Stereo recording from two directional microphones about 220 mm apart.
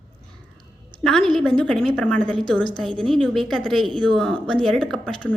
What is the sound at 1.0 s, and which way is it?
A woman's voice, centre (ahead or behind).